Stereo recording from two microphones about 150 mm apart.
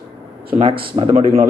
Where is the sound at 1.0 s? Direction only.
35° right (ahead or behind).